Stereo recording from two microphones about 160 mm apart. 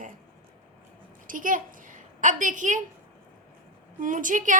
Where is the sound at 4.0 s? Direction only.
55° right (ahead or behind).